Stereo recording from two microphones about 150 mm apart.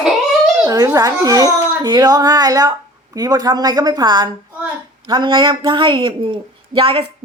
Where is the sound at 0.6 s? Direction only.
20° right (ahead or behind).